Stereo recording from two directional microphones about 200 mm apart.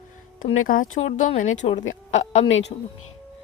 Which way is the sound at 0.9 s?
35° left (ahead or behind).